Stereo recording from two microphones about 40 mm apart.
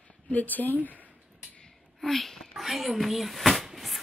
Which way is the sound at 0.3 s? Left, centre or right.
Left.